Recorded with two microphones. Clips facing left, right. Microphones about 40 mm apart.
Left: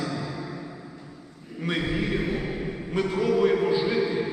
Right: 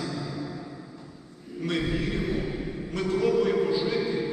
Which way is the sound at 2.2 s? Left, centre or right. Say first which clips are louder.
Left 1 dB; left.